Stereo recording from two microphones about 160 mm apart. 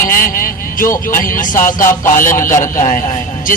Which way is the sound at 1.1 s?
60° left (ahead or behind).